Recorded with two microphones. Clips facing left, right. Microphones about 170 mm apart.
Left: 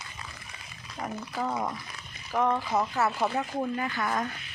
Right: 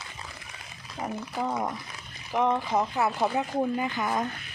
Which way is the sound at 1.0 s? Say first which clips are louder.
Right 1 dB; 15° right (ahead or behind).